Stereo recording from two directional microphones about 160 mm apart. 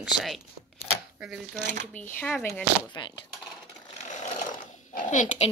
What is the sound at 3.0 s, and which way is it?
Speech, 30° left (ahead or behind).